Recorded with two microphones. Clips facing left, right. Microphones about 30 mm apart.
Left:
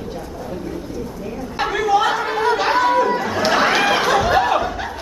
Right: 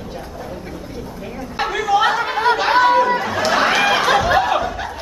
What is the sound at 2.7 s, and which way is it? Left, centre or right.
Chatter, centre.